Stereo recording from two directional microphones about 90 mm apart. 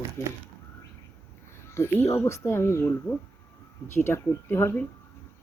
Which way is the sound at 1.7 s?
25° left (ahead or behind).